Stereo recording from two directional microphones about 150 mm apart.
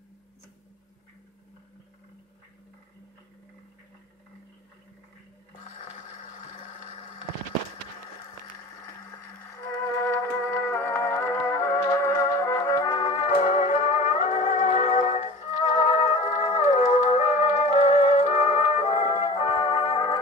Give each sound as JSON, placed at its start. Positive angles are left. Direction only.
{"t": 5.6, "sound": "blender", "side_deg": 55}
{"t": 9.1, "sound": "music", "side_deg": 20}
{"t": 13.0, "sound": "music", "side_deg": 45}